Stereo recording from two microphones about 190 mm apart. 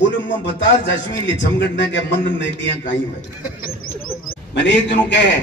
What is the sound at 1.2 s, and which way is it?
Speech, 70° left (ahead or behind).